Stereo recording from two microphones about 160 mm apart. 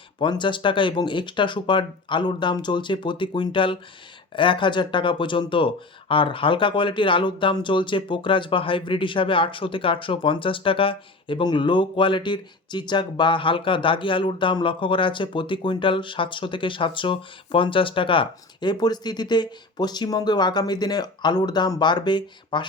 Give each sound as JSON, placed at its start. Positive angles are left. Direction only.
{"t": 0.2, "sound": "speech", "side_deg": 30}